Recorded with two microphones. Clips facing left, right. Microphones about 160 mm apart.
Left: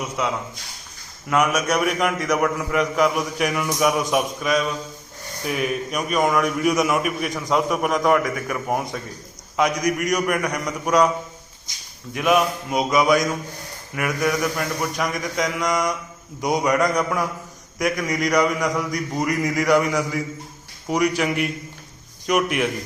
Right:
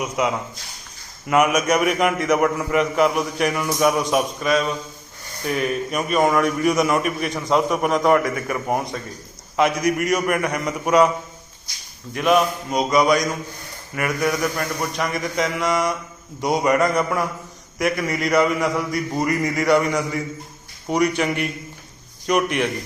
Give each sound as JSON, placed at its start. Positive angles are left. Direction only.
{"t": 0.0, "sound": "a man's voice", "side_deg": -10}
{"t": 11.7, "sound": "speech", "side_deg": 20}
{"t": 12.1, "sound": "a man's voice", "side_deg": 5}